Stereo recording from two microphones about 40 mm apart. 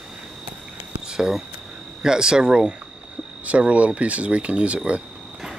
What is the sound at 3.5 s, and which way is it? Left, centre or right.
Speech, right.